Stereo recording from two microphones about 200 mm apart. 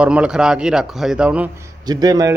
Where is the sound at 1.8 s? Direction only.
20° right (ahead or behind).